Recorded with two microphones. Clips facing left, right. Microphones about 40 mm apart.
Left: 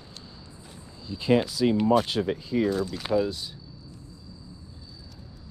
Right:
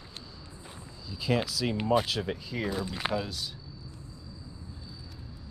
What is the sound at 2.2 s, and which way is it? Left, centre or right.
Speech, left.